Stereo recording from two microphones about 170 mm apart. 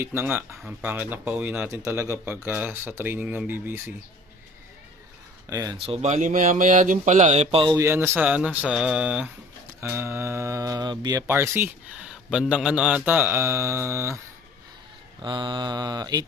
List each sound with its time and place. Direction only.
0.0 s mantra: 15° right (ahead or behind)
5.5 s mantra: 20° right (ahead or behind)
5.8 s speech: 35° right (ahead or behind)
7.7 s mantra: 15° right (ahead or behind)
9.9 s mantra: 15° right (ahead or behind)
11.3 s mantra: 15° right (ahead or behind)
15.2 s mantra: 25° right (ahead or behind)